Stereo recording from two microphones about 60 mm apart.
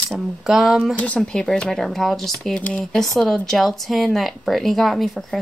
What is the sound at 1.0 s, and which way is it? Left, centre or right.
Speech, left.